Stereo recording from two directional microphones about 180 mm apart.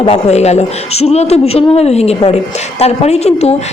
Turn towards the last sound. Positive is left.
turn(degrees=35)  # may be behind; listen again after turning